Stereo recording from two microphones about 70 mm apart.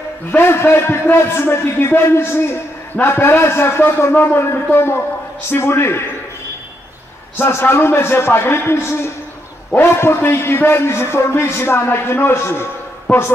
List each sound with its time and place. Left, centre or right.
0.3 s a man's voice: left
7.3 s a man's voice: left